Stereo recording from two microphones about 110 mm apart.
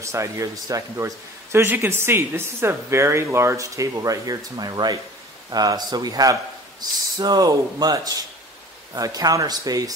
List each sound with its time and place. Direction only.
0.0 s a man's voice: 30° right (ahead or behind)